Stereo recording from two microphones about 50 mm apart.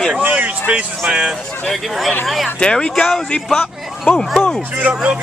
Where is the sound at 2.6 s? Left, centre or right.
Centre.